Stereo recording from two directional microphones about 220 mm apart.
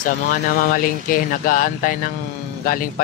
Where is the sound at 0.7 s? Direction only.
40° left (ahead or behind).